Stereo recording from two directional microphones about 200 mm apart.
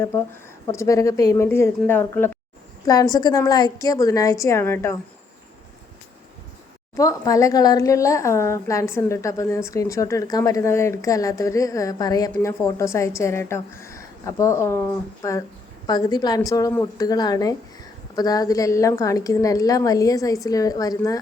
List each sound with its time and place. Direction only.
0.0 s speech: 15° left (ahead or behind)
6.9 s a woman's voice: 15° left (ahead or behind)